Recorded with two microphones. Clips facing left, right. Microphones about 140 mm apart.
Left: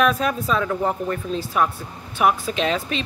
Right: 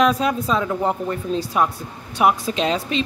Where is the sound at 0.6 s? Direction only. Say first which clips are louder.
Right 1 dB; 20° right (ahead or behind).